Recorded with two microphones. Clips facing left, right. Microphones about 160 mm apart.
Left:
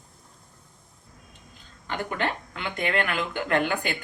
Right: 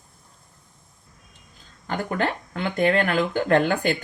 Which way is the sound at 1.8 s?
40° right (ahead or behind).